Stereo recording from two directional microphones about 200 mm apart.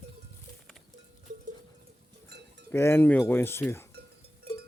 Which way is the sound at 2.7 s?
10° left (ahead or behind).